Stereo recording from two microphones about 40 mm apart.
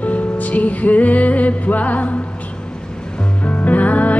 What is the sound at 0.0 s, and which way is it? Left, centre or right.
Music, left.